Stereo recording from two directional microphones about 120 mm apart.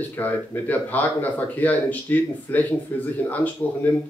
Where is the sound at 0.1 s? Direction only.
20° left (ahead or behind).